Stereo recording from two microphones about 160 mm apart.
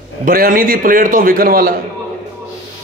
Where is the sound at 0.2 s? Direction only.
60° right (ahead or behind).